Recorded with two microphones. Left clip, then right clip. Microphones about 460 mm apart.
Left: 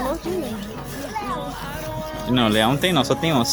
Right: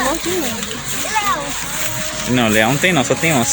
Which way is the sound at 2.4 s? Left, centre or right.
Left.